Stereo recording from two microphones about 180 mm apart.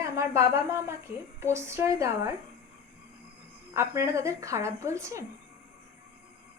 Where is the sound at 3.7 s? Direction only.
15° right (ahead or behind).